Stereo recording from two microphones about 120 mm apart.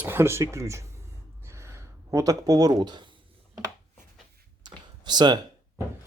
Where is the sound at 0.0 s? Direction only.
20° right (ahead or behind).